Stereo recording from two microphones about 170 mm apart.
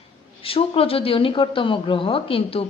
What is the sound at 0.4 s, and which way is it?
A woman's voice, 35° left (ahead or behind).